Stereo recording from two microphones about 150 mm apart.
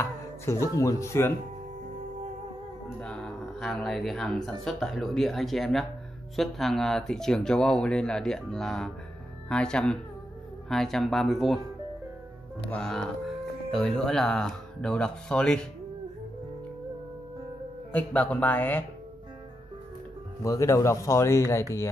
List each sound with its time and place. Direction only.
0.0 s speech: 20° left (ahead or behind)
3.0 s speech: 5° left (ahead or behind)
12.7 s speech: 5° left (ahead or behind)
17.9 s a man's voice: 10° left (ahead or behind)
20.4 s speech: 20° left (ahead or behind)